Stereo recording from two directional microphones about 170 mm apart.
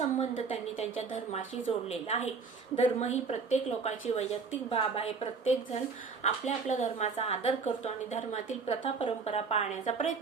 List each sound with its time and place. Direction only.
0.2 s a woman's voice: 40° left (ahead or behind)